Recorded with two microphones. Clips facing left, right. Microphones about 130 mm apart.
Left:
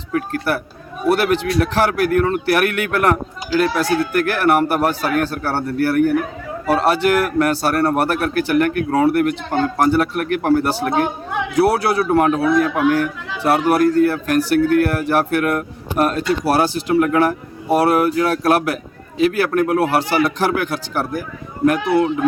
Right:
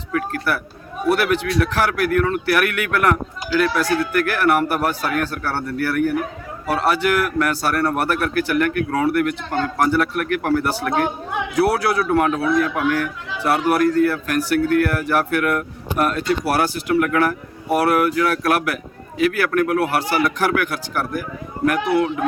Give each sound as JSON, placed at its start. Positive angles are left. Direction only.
{"t": 0.1, "sound": "speech", "side_deg": 30}
{"t": 9.5, "sound": "speech", "side_deg": 20}